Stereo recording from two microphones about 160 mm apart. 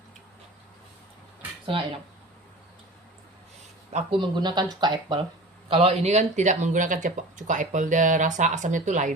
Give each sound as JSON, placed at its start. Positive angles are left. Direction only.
{"t": 3.9, "sound": "speech", "side_deg": -30}